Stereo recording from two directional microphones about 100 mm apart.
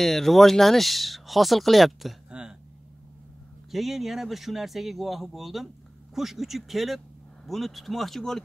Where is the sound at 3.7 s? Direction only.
Centre (ahead or behind).